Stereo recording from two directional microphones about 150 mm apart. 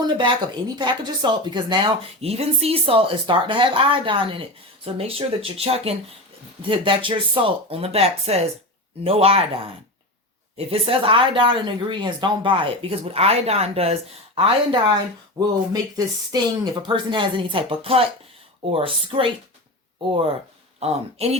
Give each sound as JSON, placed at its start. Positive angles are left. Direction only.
{"t": 0.0, "sound": "speech", "side_deg": -30}
{"t": 10.7, "sound": "speech", "side_deg": -40}
{"t": 15.4, "sound": "speech", "side_deg": -25}